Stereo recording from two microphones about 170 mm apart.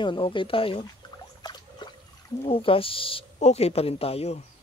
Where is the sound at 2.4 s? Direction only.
35° left (ahead or behind).